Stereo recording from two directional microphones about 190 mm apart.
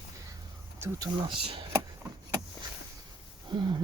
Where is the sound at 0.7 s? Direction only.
15° right (ahead or behind).